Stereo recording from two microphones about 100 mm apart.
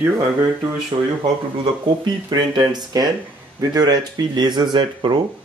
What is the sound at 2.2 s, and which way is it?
Speech, 45° right (ahead or behind).